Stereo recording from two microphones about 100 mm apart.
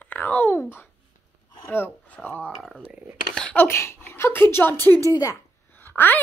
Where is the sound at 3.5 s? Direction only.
25° left (ahead or behind).